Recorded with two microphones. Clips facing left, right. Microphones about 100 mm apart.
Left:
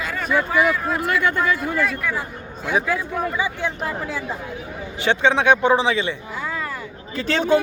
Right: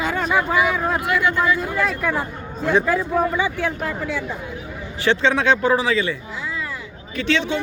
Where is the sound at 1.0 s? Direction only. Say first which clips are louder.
Left 1 dB; 50° left (ahead or behind).